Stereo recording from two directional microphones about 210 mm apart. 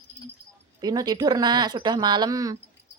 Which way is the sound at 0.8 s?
20° right (ahead or behind).